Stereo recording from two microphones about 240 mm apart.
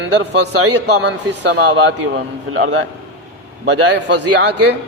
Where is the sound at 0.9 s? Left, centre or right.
Right.